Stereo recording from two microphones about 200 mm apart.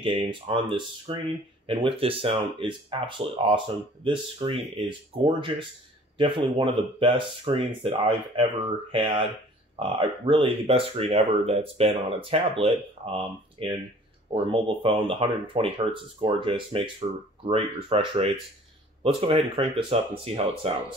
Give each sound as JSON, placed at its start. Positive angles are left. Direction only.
{"t": 0.0, "sound": "speech", "side_deg": -25}